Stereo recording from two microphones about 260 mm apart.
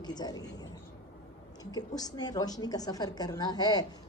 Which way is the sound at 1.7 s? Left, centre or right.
Centre.